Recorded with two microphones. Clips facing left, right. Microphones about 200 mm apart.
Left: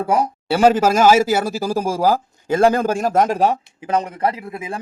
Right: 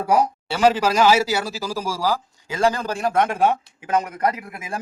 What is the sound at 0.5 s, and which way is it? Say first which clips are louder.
A man's voice: left 4 dB; 50° left (ahead or behind).